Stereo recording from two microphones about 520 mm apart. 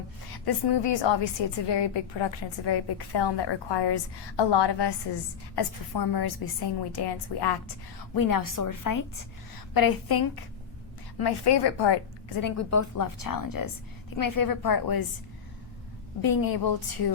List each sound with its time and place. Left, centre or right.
0.3 s a woman's voice: left
12.4 s a woman's voice: left
16.2 s a woman's voice: left